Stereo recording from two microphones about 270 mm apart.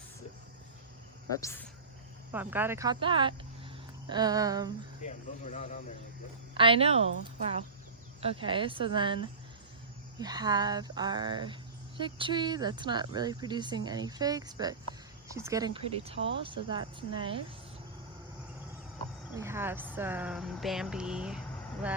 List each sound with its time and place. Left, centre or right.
1.4 s speech: centre
2.3 s speech: centre
5.0 s speech: left
6.5 s speech: centre
8.2 s speech: centre
19.4 s speech: centre